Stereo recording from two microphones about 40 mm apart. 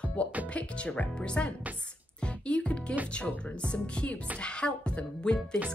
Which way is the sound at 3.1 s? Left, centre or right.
Left.